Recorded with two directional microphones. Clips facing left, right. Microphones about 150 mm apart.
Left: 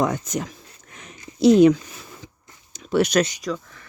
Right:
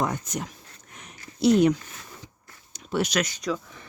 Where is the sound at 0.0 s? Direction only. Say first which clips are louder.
Left 5 dB; 90° left.